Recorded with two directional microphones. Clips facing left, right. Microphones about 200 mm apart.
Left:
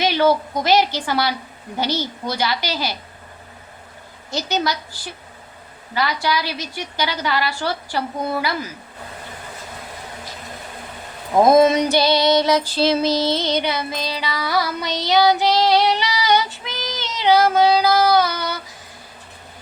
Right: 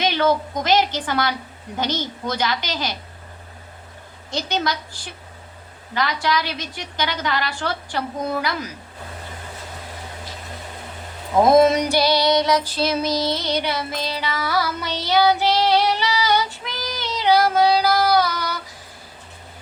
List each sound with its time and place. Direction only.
0.0 s a woman's voice: 10° left (ahead or behind)
4.3 s a woman's voice: 5° left (ahead or behind)
5.9 s a woman's voice: 5° left (ahead or behind)
11.5 s female singing: 20° left (ahead or behind)